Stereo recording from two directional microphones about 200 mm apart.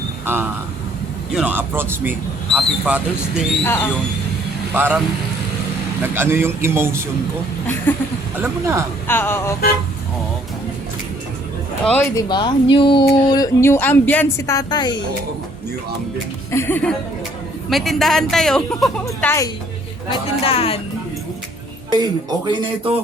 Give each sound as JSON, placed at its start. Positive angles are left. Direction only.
{"t": 0.3, "sound": "a woman's voice", "side_deg": -10}
{"t": 3.6, "sound": "speech", "side_deg": 10}
{"t": 4.7, "sound": "speech", "side_deg": -10}
{"t": 7.9, "sound": "speech", "side_deg": 10}
{"t": 8.4, "sound": "speech", "side_deg": -15}
{"t": 9.0, "sound": "speech", "side_deg": 10}
{"t": 12.1, "sound": "speech", "side_deg": 20}
{"t": 16.5, "sound": "a woman's voice", "side_deg": 10}
{"t": 19.0, "sound": "speech", "side_deg": 15}
{"t": 20.1, "sound": "speech", "side_deg": 30}
{"t": 21.8, "sound": "speech", "side_deg": -20}